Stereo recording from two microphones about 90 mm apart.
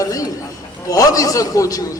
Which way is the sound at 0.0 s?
40° left (ahead or behind).